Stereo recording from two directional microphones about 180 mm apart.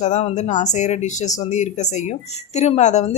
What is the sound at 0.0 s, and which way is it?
A woman's voice, 35° left (ahead or behind).